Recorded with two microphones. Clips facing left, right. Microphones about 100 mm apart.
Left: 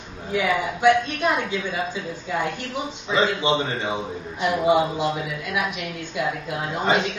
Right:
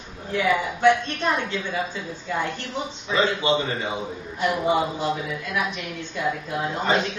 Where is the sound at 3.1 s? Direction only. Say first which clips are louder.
Left 1 dB; 20° left (ahead or behind).